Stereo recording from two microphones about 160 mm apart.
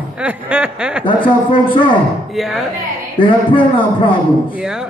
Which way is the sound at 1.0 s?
30° left (ahead or behind).